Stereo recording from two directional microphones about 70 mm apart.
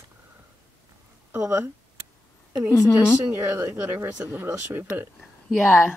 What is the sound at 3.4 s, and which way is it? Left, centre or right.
Speech, right.